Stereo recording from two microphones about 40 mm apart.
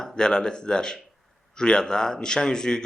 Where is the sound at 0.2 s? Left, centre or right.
Centre.